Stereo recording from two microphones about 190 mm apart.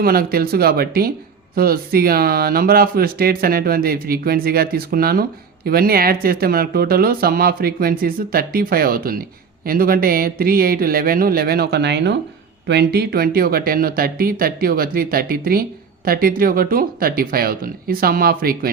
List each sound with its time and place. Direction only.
0.0 s speech: 50° right (ahead or behind)